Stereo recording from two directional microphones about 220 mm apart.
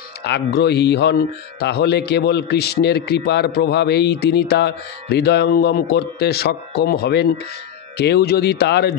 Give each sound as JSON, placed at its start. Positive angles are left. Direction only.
{"t": 0.2, "sound": "a man's voice", "side_deg": 50}